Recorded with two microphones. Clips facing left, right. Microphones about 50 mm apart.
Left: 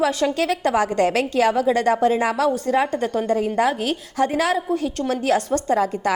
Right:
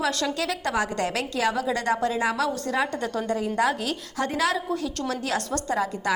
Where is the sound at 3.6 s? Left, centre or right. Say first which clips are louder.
Left 4 dB; left.